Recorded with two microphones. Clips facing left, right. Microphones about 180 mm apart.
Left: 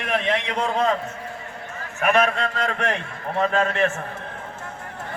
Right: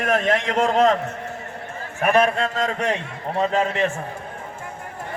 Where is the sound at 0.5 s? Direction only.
90° right.